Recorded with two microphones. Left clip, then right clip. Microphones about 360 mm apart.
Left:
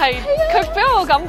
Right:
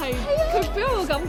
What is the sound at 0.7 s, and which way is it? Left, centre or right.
Speech, left.